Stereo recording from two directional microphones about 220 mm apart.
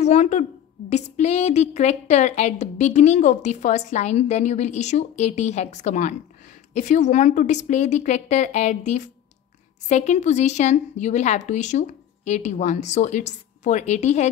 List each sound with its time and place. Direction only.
0.0 s a woman's voice: 30° left (ahead or behind)